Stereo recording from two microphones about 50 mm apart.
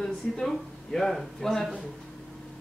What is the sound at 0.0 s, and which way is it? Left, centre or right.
Speech, centre.